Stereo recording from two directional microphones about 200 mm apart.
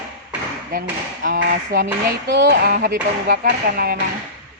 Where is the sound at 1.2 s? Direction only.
45° right (ahead or behind).